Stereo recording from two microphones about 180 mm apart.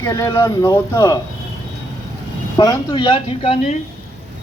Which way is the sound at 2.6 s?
25° left (ahead or behind).